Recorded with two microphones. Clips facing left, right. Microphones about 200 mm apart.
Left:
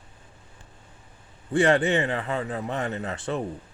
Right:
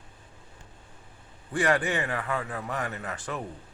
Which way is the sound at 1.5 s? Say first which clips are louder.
Left 5 dB; 25° left (ahead or behind).